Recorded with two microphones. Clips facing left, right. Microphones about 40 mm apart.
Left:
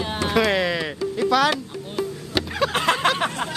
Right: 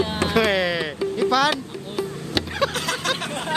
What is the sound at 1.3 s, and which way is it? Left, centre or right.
Music, centre.